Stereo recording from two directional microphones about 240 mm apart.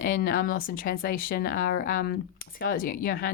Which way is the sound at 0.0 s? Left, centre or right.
Left.